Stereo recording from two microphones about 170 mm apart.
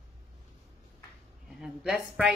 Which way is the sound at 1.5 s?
Centre (ahead or behind).